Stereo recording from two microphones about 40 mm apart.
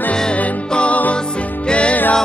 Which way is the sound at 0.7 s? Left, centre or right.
Left.